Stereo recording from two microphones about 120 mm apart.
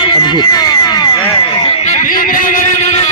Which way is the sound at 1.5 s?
45° left (ahead or behind).